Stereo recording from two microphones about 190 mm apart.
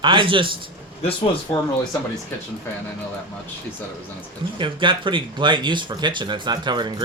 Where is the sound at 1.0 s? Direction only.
30° left (ahead or behind).